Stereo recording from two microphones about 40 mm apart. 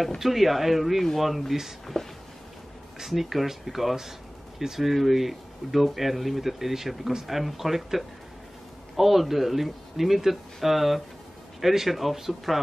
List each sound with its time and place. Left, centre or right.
0.2 s speech: centre
3.0 s speech: centre